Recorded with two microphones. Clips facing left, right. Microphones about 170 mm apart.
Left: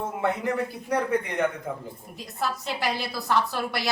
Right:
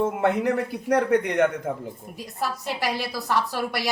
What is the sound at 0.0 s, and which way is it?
A man's voice, 75° right (ahead or behind).